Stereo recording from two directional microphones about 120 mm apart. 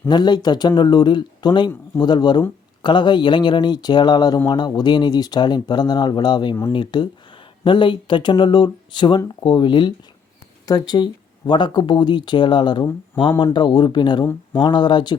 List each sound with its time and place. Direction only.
0.1 s speech: 35° left (ahead or behind)